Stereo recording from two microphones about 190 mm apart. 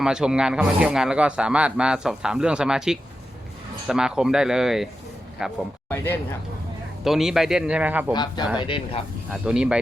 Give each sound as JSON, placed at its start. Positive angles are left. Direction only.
{"t": 0.0, "sound": "a man's voice", "side_deg": -5}
{"t": 7.0, "sound": "a man's voice", "side_deg": 0}
{"t": 8.1, "sound": "speech", "side_deg": 25}
{"t": 9.3, "sound": "a man's voice", "side_deg": -5}